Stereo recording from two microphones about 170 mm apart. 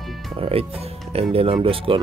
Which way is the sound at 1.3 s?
35° right (ahead or behind).